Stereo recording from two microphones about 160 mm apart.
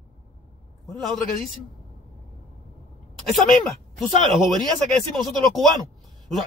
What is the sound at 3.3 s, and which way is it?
Speech, centre (ahead or behind).